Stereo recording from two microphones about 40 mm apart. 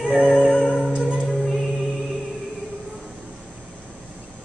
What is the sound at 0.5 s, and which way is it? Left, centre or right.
Music, left.